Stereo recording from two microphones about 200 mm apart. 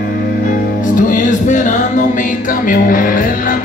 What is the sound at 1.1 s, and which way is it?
Music, 40° left (ahead or behind).